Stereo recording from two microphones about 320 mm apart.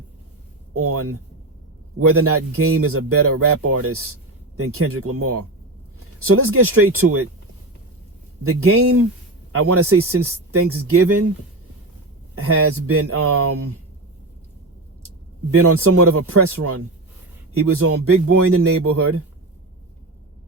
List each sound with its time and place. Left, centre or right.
0.7 s speech: right
8.4 s speech: right
12.4 s speech: right
15.5 s speech: right